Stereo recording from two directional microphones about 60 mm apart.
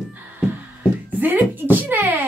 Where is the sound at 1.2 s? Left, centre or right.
Right.